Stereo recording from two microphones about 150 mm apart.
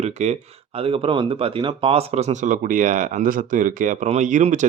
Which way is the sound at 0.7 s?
40° right (ahead or behind).